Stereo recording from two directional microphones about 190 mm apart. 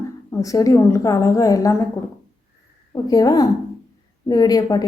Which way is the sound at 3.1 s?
20° left (ahead or behind).